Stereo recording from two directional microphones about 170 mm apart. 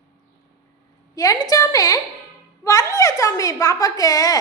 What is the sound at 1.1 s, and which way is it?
A woman's voice, 20° left (ahead or behind).